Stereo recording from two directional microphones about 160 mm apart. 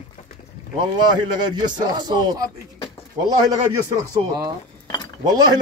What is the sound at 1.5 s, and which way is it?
Speech, 25° right (ahead or behind).